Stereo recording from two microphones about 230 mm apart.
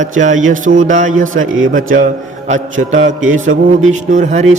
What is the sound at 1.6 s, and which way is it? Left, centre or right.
Speech, right.